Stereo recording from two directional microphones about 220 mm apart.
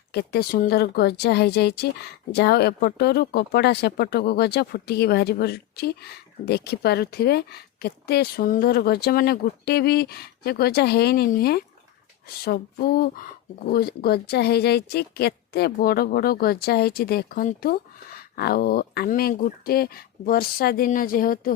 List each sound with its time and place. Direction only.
0.1 s speech: 45° left (ahead or behind)